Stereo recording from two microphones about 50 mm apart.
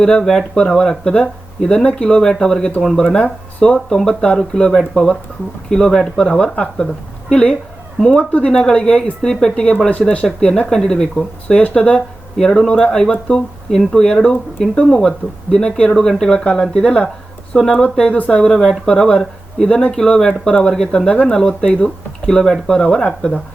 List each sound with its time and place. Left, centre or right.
0.0 s speech: centre
10.2 s speech: centre